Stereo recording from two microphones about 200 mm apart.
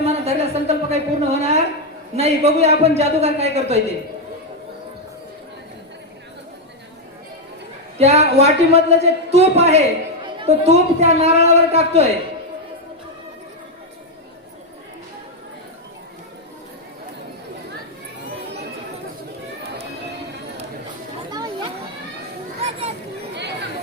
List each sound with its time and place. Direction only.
0.0 s a sound: 30° right (ahead or behind)
2.1 s speech: 30° right (ahead or behind)
7.9 s speech: 30° right (ahead or behind)
21.2 s children playing: 20° right (ahead or behind)